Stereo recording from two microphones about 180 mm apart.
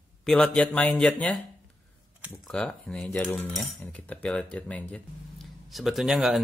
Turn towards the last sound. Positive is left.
turn(degrees=-5)  # may be behind; listen again after turning